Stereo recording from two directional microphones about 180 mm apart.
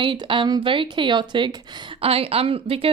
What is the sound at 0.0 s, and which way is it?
A woman's voice, 25° right (ahead or behind).